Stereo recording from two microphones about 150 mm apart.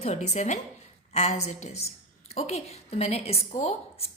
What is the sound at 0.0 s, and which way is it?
A woman's voice, 50° left (ahead or behind).